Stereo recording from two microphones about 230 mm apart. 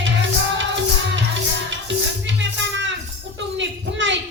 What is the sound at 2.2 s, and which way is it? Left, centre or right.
Music, right.